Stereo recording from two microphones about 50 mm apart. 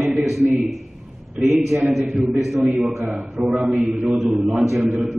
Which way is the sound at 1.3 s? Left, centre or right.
Centre.